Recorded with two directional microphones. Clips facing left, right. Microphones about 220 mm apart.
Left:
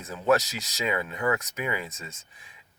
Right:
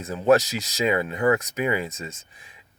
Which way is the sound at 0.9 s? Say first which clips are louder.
Right 6 dB; 30° right (ahead or behind).